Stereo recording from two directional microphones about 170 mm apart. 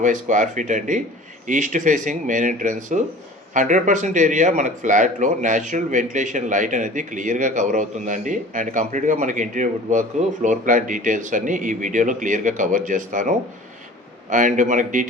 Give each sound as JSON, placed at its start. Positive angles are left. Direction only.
{"t": 0.0, "sound": "speech", "side_deg": -50}